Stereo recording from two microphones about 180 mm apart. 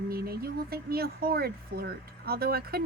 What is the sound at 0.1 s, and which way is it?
Speech, 60° right (ahead or behind).